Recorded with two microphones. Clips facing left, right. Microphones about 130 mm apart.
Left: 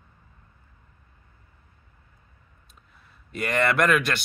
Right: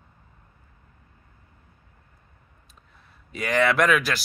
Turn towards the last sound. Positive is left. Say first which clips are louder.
# right 1 dB
turn(degrees=0)  # may be behind; listen again after turning